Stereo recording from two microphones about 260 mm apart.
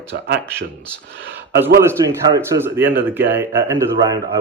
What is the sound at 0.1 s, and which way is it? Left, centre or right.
Speech, right.